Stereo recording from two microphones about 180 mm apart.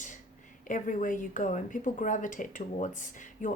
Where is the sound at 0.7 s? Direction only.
45° left (ahead or behind).